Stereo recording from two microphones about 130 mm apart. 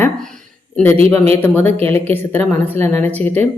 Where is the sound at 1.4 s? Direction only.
15° left (ahead or behind).